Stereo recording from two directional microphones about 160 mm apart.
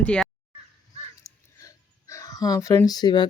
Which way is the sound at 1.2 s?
20° left (ahead or behind).